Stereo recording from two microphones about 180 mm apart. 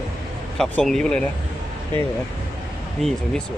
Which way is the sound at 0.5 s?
Centre (ahead or behind).